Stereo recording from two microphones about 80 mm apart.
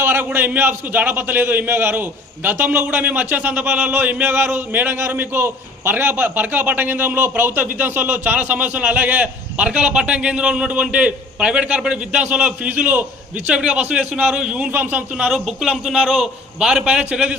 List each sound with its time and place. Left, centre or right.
0.0 s a sound: right
0.3 s a man's voice: right
14.7 s a man's voice: right
15.3 s a man's voice: centre